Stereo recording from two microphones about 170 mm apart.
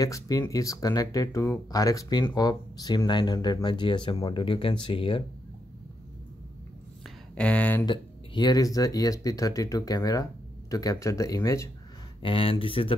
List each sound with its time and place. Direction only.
0.0 s speech: 20° left (ahead or behind)
7.3 s speech: 5° left (ahead or behind)
7.8 s speech: 25° left (ahead or behind)
12.2 s speech: 30° left (ahead or behind)